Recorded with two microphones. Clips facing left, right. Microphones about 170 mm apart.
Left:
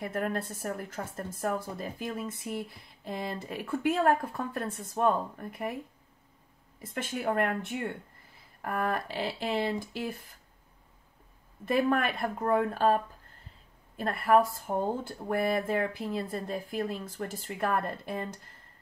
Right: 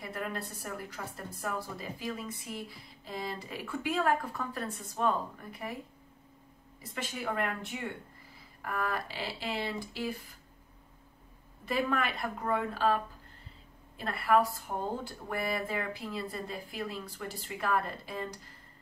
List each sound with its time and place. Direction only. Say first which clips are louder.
0.0 s speech: left 6 dB; 50° left (ahead or behind)
6.8 s speech: left 4 dB; 50° left (ahead or behind)
11.6 s speech: left 5 dB; 50° left (ahead or behind)